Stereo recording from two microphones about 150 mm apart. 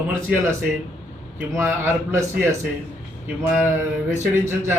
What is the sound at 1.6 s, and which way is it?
Speech, 15° right (ahead or behind).